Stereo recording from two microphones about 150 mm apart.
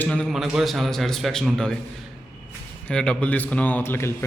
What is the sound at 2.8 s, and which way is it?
A man's voice, 5° left (ahead or behind).